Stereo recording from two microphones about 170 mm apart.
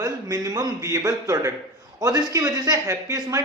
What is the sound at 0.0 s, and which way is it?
Speech, 20° right (ahead or behind).